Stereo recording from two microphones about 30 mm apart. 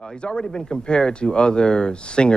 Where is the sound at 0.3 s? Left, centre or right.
Left.